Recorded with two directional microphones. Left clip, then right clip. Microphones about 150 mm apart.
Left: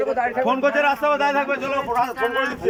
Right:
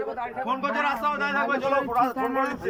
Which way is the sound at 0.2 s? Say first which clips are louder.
Left 7 dB; 55° left (ahead or behind).